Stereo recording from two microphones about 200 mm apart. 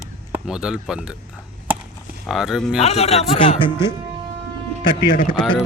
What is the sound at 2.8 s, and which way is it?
Speech, 30° left (ahead or behind).